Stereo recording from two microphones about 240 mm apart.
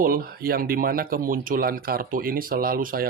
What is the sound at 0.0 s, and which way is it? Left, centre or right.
Speech, right.